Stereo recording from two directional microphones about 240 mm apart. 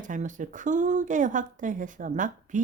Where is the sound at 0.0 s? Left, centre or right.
Right.